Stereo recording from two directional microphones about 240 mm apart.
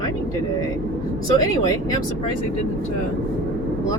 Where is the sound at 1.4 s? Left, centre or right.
Centre.